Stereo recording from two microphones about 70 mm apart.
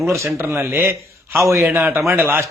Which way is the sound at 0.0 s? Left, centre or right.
Right.